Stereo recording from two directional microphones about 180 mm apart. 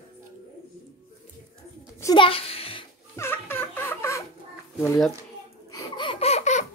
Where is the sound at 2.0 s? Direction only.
25° left (ahead or behind).